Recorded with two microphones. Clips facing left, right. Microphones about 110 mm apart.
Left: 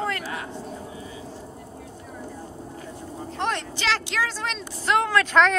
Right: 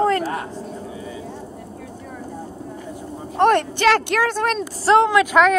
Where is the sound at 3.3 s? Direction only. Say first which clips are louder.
Right 12 dB; 55° right (ahead or behind).